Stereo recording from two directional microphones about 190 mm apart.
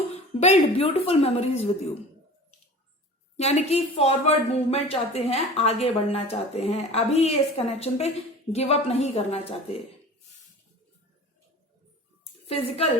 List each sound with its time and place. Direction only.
0.1 s a woman's voice: 35° left (ahead or behind)
3.3 s a woman's voice: 35° left (ahead or behind)
12.5 s a woman's voice: 30° left (ahead or behind)